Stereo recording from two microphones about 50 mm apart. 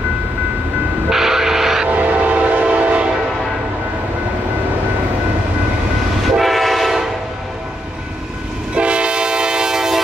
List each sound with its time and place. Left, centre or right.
1.1 s train: centre
1.9 s train: right
6.4 s train: centre
8.7 s train: right